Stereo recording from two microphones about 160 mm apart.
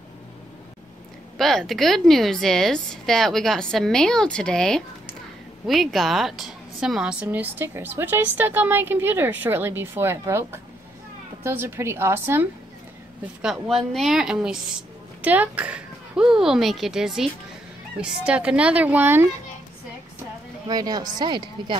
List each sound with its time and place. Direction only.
1.4 s a woman's voice: centre (ahead or behind)
20.6 s a woman's voice: 25° right (ahead or behind)